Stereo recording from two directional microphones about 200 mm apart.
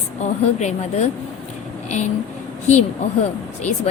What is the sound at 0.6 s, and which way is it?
Speech, 35° left (ahead or behind).